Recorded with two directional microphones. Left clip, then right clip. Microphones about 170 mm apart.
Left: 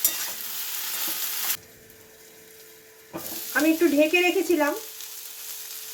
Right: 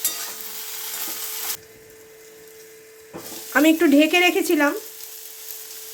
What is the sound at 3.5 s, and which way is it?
Speech, 90° right.